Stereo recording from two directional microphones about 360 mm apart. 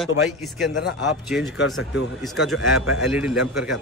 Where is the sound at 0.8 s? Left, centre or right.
Left.